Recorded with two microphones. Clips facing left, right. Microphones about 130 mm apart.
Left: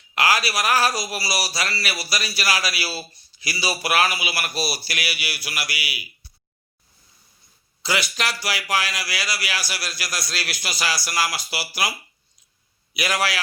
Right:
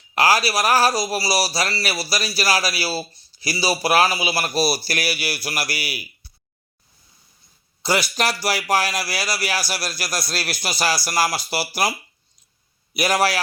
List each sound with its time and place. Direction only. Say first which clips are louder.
0.1 s a man's voice: right 3 dB; 35° right (ahead or behind)
8.1 s a man's voice: right 5 dB; 35° right (ahead or behind)
12.9 s a man's voice: right 5 dB; 35° right (ahead or behind)